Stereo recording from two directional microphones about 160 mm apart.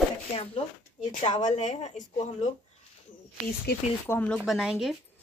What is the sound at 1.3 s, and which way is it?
Speech, 50° left (ahead or behind).